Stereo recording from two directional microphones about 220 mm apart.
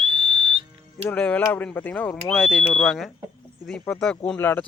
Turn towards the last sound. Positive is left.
turn(degrees=10)  # may be behind; listen again after turning